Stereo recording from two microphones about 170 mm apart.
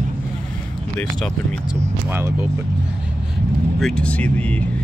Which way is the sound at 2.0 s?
10° right (ahead or behind).